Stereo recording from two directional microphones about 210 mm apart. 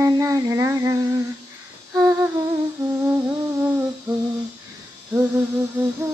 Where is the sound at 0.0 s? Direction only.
15° right (ahead or behind).